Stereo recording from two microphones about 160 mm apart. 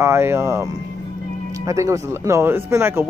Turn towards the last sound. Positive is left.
turn(degrees=-15)  # may be behind; listen again after turning